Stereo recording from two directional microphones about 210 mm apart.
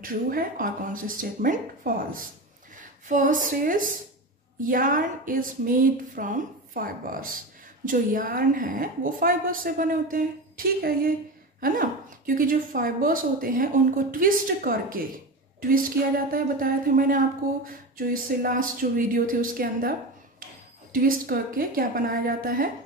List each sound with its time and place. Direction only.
0.0 s a woman's voice: 45° right (ahead or behind)